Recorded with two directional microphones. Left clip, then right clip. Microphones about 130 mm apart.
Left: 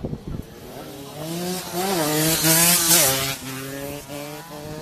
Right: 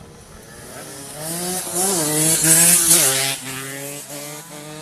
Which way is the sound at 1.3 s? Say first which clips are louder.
Right 2 dB; 50° right (ahead or behind).